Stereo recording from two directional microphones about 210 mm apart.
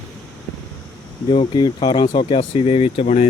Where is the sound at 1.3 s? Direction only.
25° left (ahead or behind).